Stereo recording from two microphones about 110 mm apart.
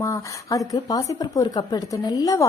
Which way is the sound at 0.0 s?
30° left (ahead or behind).